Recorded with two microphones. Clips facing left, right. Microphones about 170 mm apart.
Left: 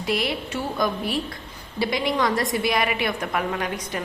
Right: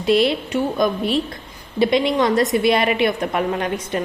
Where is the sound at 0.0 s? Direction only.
25° right (ahead or behind).